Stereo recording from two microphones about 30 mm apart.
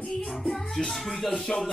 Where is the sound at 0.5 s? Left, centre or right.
Centre.